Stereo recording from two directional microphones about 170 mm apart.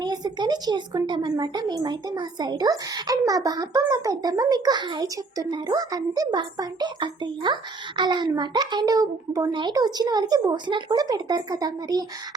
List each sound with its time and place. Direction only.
0.0 s speech: 25° right (ahead or behind)